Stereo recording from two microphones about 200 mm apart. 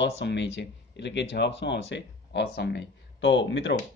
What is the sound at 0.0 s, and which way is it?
Speech, 60° left (ahead or behind).